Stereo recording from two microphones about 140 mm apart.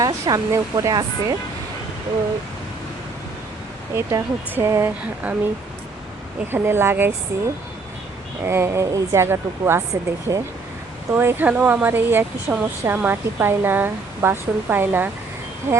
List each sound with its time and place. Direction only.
0.0 s speech: 25° right (ahead or behind)
3.9 s speech: 20° right (ahead or behind)
6.5 s speech: 15° right (ahead or behind)